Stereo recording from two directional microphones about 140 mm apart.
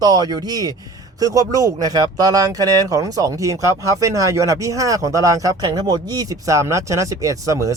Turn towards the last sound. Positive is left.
turn(degrees=-25)  # may be behind; listen again after turning